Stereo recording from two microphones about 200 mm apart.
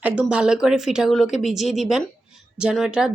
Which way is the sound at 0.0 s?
5° right (ahead or behind).